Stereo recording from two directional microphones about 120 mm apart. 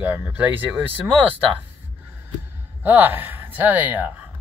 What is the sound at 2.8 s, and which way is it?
Speech, 15° right (ahead or behind).